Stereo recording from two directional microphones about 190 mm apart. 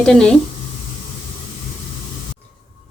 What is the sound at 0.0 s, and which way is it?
Speech, 5° left (ahead or behind).